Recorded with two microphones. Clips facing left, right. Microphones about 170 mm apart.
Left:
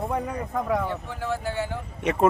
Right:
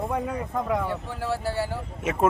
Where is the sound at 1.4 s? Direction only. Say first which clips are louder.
Right 1 dB; 35° right (ahead or behind).